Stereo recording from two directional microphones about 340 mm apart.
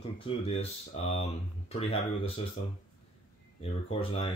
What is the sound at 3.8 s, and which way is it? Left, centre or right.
Speech, centre.